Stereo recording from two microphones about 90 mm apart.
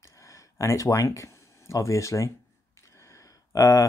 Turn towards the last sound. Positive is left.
turn(degrees=40)  # may be behind; listen again after turning